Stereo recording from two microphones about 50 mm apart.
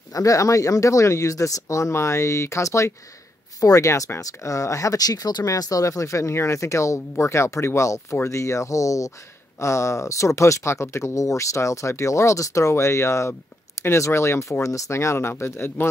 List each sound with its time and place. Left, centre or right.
0.2 s speech: left
9.6 s speech: left
13.8 s speech: left
15.3 s speech: left